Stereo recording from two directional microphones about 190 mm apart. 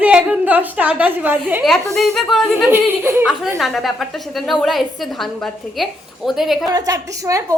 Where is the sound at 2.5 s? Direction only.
10° right (ahead or behind).